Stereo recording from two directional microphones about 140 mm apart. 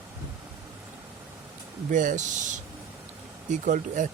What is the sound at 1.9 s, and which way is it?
Speech, 65° right (ahead or behind).